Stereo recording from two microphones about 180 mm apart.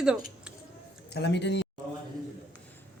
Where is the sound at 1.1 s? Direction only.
70° left (ahead or behind).